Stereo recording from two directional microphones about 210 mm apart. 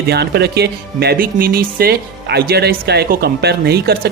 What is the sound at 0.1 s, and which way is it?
Speech, 50° right (ahead or behind).